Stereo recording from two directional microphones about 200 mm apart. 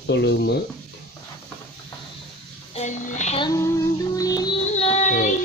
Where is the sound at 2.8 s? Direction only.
35° left (ahead or behind).